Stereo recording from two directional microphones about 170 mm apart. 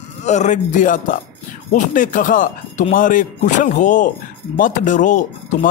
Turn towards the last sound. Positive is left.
turn(degrees=50)  # may be behind; listen again after turning